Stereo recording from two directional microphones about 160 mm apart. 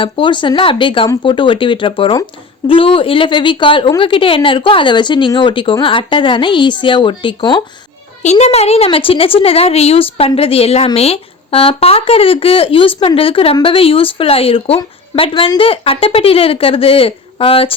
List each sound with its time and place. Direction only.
0.0 s speech: 30° left (ahead or behind)
8.2 s speech: 45° left (ahead or behind)